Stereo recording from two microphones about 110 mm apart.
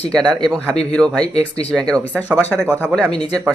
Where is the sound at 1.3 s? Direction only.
65° left (ahead or behind).